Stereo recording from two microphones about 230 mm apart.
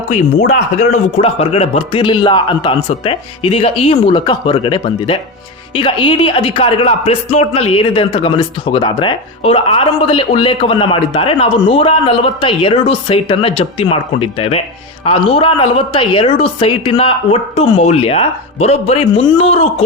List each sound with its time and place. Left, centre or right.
0.1 s speech: left